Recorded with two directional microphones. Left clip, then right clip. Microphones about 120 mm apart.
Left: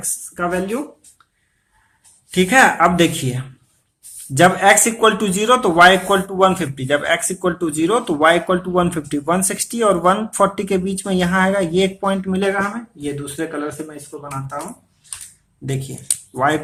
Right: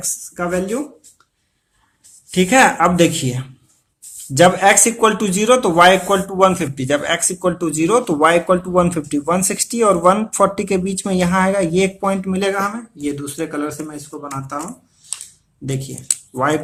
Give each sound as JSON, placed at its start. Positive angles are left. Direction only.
{"t": 0.3, "sound": "speech", "side_deg": -25}
{"t": 2.3, "sound": "speech", "side_deg": -20}
{"t": 15.6, "sound": "speech", "side_deg": -25}